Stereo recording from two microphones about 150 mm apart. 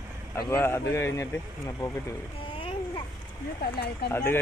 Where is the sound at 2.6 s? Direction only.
35° left (ahead or behind).